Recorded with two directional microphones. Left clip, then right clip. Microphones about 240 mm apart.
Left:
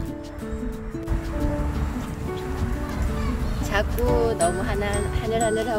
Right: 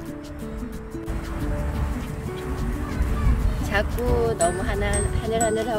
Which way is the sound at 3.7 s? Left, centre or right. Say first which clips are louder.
Left 1 dB; centre.